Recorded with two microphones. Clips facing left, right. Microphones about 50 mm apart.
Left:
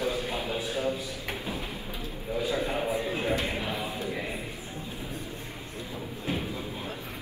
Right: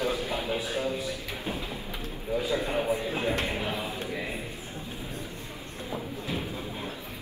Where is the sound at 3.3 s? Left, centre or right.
Right.